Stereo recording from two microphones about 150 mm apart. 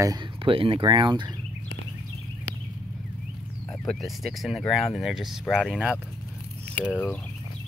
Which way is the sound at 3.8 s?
Centre (ahead or behind).